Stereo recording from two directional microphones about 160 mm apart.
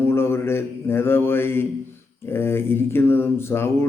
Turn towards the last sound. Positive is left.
turn(degrees=15)  # may be behind; listen again after turning